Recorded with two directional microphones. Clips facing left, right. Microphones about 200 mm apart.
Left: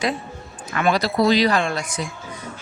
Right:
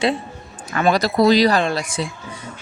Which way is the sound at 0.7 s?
40° right (ahead or behind).